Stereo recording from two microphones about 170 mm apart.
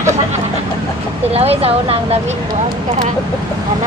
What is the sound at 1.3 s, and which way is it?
Speech, 35° right (ahead or behind).